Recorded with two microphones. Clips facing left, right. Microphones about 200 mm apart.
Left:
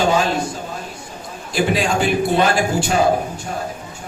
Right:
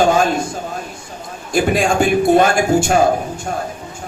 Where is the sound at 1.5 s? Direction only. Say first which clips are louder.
Right 3 dB; 50° right (ahead or behind).